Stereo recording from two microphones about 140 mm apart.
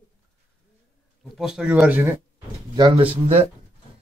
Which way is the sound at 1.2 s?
Centre (ahead or behind).